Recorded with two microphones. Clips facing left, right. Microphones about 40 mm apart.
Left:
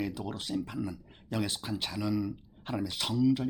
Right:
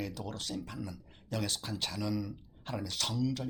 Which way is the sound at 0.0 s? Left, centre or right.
Centre.